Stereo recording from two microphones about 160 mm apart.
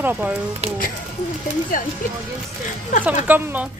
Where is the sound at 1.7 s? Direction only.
60° left (ahead or behind).